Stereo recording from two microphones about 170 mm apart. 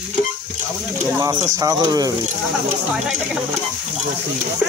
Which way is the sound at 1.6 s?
20° right (ahead or behind).